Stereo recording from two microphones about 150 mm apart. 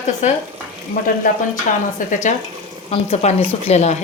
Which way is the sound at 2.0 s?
65° left (ahead or behind).